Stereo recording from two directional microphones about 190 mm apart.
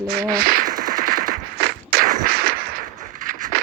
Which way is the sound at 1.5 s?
55° right (ahead or behind).